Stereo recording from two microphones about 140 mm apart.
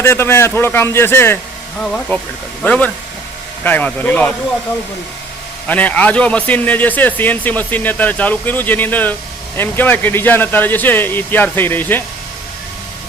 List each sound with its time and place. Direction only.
0.0 s a man's voice: 20° left (ahead or behind)
5.6 s a man's voice: 10° left (ahead or behind)